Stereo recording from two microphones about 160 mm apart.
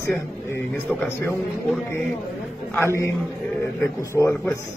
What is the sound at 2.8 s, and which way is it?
A man's voice, 15° left (ahead or behind).